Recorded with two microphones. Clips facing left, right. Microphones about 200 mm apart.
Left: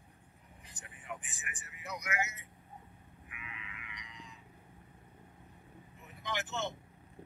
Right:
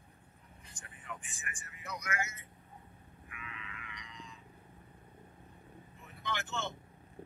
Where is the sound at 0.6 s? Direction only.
15° left (ahead or behind).